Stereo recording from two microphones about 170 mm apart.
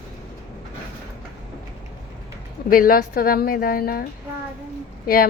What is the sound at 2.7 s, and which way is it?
A woman's voice, 55° left (ahead or behind).